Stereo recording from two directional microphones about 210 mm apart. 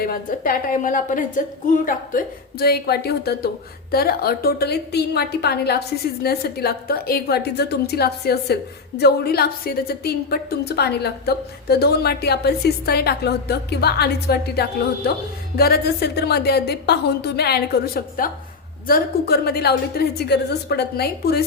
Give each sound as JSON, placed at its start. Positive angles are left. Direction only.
{"t": 0.0, "sound": "a woman's voice", "side_deg": 40}